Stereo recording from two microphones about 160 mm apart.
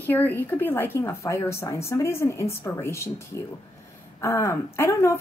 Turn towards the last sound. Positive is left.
turn(degrees=15)  # may be behind; listen again after turning